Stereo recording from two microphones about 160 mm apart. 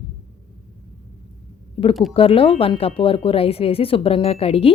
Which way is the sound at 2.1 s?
35° left (ahead or behind).